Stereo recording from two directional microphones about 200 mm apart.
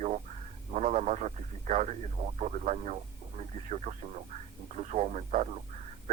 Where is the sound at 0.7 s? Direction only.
35° right (ahead or behind).